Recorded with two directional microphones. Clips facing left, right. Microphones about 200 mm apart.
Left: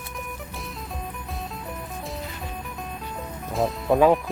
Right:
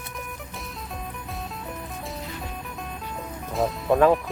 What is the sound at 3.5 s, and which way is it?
Music, centre (ahead or behind).